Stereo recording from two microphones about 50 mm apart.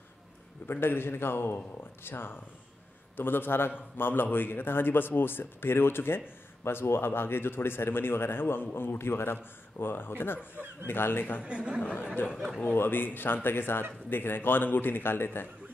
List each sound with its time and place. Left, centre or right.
0.7 s a man's voice: left
11.4 s speech: right
11.8 s speech: left
12.7 s a man's voice: left